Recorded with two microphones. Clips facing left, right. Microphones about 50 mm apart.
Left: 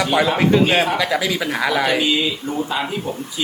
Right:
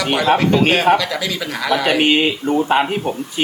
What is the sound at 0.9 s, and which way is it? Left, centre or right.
Speech, centre.